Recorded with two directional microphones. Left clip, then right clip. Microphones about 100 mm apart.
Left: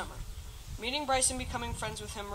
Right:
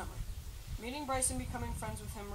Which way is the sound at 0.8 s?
25° left (ahead or behind).